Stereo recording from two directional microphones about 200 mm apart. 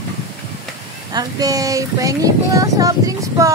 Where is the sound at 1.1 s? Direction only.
20° right (ahead or behind).